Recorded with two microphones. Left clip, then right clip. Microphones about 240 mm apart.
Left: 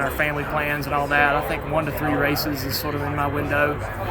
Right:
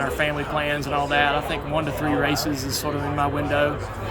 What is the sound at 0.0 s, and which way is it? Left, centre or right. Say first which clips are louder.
Speech: left 1 dB; centre.